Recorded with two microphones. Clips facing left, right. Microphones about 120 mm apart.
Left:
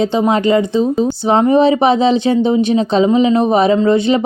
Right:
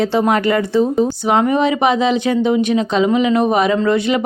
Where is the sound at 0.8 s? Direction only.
15° right (ahead or behind).